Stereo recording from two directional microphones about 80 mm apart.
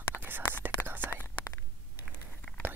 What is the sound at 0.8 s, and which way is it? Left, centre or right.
Whispering, left.